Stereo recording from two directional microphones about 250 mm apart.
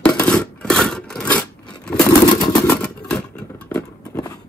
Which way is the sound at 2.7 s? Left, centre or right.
Centre.